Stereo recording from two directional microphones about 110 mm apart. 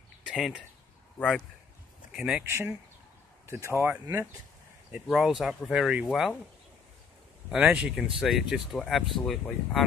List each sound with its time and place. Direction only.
0.3 s speech: centre (ahead or behind)
2.1 s speech: 5° right (ahead or behind)
2.4 s speech: 25° right (ahead or behind)
3.7 s speech: 25° right (ahead or behind)
4.9 s speech: 5° right (ahead or behind)
7.5 s speech: 10° right (ahead or behind)